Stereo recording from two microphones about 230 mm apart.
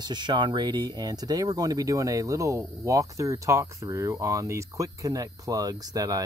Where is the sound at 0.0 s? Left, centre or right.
Centre.